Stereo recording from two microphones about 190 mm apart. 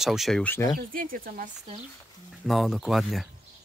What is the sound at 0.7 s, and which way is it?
Speech, 50° right (ahead or behind).